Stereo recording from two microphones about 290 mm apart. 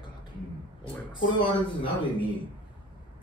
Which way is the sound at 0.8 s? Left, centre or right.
Centre.